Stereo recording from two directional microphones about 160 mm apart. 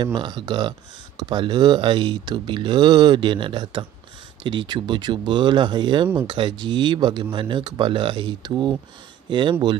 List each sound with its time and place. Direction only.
0.0 s speech: 30° right (ahead or behind)